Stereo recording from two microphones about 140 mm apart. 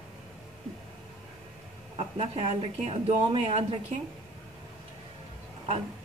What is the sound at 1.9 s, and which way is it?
Speech, 50° right (ahead or behind).